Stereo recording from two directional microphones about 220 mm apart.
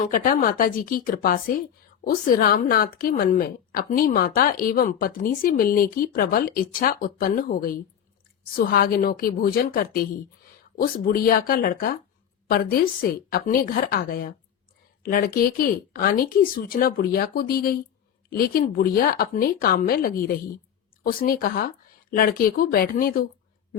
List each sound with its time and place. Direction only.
0.0 s a woman's voice: 40° left (ahead or behind)